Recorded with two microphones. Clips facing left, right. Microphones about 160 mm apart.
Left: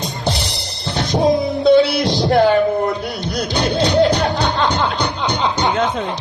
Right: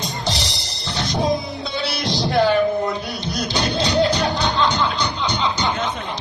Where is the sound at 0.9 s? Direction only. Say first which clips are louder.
Left 5 dB; 55° left (ahead or behind).